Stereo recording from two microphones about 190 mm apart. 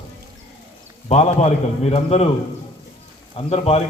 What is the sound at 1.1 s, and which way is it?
A man's voice, 35° left (ahead or behind).